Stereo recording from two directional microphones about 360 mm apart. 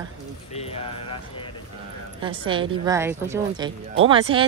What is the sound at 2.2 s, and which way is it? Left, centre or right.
Speech, centre.